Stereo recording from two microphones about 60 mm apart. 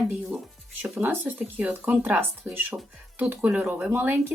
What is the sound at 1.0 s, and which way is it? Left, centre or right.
A woman's voice, right.